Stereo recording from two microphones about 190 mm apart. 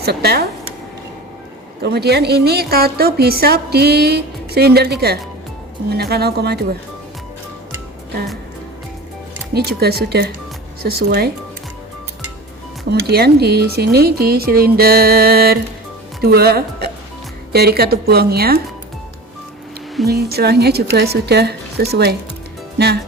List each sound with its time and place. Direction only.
0.0 s a woman's voice: 55° right (ahead or behind)
1.8 s a woman's voice: 60° right (ahead or behind)
9.6 s a woman's voice: 55° right (ahead or behind)
12.9 s a woman's voice: 60° right (ahead or behind)
20.1 s a woman's voice: 55° right (ahead or behind)